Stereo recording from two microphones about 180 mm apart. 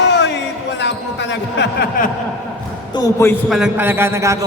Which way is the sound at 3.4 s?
Centre (ahead or behind).